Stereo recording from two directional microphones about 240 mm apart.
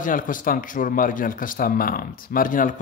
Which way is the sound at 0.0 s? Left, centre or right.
Left.